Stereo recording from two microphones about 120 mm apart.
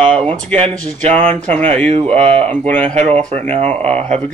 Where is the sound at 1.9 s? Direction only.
60° right (ahead or behind).